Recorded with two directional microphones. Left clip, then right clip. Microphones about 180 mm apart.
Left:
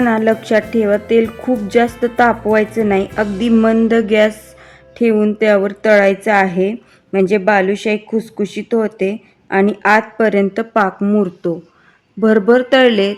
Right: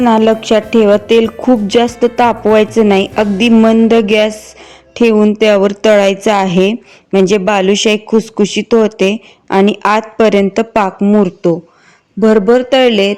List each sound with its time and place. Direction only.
0.0 s a woman's voice: 25° right (ahead or behind)
2.2 s speech: 40° right (ahead or behind)
3.4 s a woman's voice: 20° right (ahead or behind)